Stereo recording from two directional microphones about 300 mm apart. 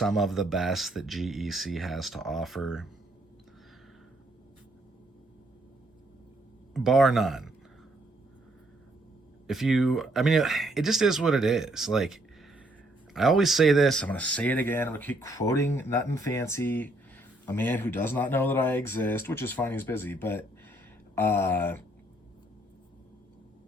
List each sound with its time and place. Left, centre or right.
0.0 s speech: centre
6.7 s speech: centre
9.5 s speech: centre